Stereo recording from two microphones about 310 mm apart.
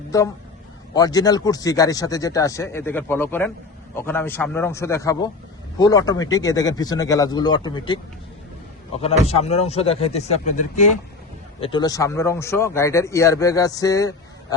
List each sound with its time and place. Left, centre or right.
0.1 s speech: centre
9.0 s speech: centre